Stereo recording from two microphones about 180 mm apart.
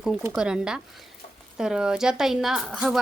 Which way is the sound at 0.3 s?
5° right (ahead or behind).